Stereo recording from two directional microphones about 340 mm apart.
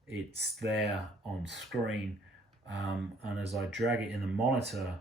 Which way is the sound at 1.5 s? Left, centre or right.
Centre.